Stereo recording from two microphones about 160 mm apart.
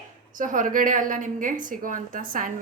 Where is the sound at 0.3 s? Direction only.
55° right (ahead or behind).